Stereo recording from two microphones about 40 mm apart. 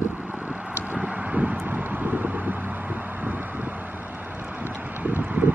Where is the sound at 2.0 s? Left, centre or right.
Right.